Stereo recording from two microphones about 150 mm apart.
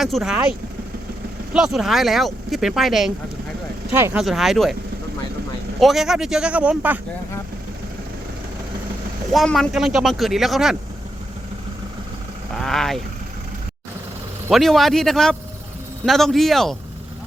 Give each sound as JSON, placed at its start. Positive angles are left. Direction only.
{"t": 0.0, "sound": "speech", "side_deg": 0}
{"t": 1.5, "sound": "speech", "side_deg": -5}
{"t": 3.9, "sound": "speech", "side_deg": -15}
{"t": 4.2, "sound": "speech", "side_deg": 0}
{"t": 5.8, "sound": "speech", "side_deg": 0}
{"t": 9.3, "sound": "speech", "side_deg": 0}
{"t": 12.5, "sound": "speech", "side_deg": 5}
{"t": 14.5, "sound": "speech", "side_deg": 0}